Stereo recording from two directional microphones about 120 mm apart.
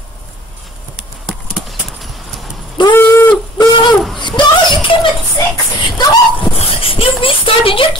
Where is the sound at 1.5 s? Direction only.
Centre (ahead or behind).